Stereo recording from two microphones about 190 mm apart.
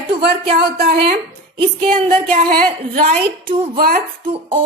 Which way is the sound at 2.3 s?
50° right (ahead or behind).